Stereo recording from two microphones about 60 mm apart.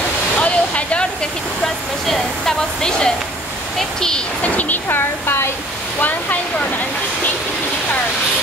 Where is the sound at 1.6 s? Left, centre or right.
Centre.